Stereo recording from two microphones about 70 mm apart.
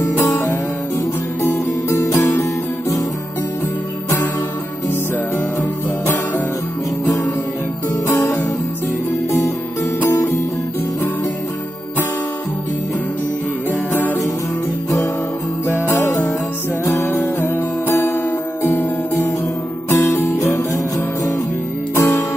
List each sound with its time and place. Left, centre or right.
0.0 s music: left
1.4 s music: left
8.2 s music: left
10.1 s music: left
13.7 s music: left
15.6 s music: left
21.9 s music: left